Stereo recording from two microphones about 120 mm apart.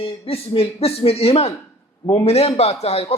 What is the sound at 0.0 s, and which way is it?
A man's voice, 55° left (ahead or behind).